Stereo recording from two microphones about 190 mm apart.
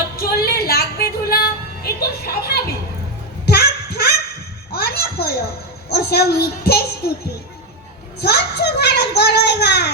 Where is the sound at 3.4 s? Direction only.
55° left (ahead or behind).